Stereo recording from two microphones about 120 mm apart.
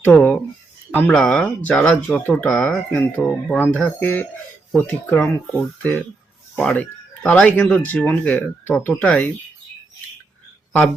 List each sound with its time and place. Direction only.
0.0 s speech: 10° left (ahead or behind)
6.6 s speech: 10° left (ahead or behind)